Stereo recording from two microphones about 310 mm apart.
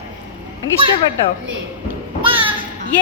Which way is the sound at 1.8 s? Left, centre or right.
Centre.